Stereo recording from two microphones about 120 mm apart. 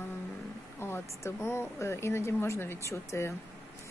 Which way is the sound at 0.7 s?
20° left (ahead or behind).